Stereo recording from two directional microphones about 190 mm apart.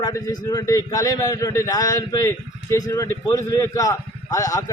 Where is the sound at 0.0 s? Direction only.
20° left (ahead or behind).